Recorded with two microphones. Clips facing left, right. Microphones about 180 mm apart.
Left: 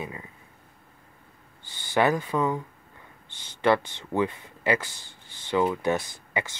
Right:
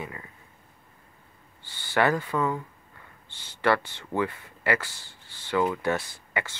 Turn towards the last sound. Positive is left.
turn(degrees=15)  # may be behind; listen again after turning